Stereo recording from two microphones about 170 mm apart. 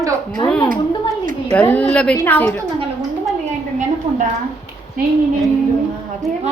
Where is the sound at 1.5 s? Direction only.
10° left (ahead or behind).